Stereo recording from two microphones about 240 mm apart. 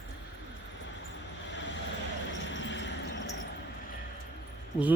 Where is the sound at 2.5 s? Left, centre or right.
Left.